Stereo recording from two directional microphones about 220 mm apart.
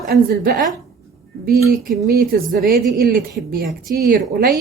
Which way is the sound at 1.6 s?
45° right (ahead or behind).